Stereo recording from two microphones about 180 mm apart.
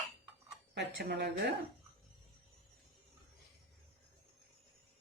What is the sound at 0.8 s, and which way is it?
Speech, 70° right (ahead or behind).